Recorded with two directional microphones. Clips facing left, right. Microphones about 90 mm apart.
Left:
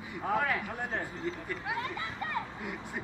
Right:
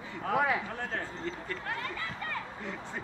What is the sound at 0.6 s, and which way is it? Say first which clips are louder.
Speech: left 1 dB; 15° left (ahead or behind).